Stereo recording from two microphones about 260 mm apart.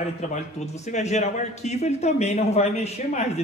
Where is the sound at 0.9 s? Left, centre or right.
Left.